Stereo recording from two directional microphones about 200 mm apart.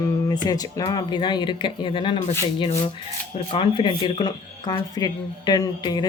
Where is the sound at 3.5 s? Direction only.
25° left (ahead or behind).